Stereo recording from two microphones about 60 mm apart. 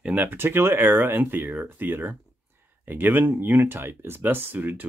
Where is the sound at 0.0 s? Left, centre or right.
Right.